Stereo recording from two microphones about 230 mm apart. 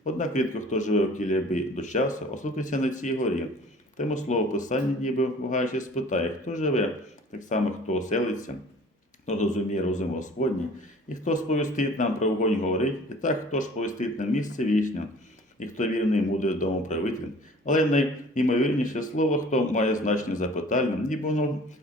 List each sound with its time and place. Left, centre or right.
0.0 s a man's voice: left